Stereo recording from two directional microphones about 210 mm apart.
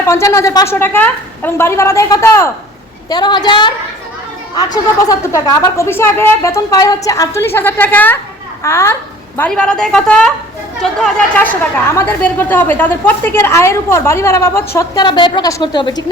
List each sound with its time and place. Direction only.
0.0 s a woman's voice: 15° left (ahead or behind)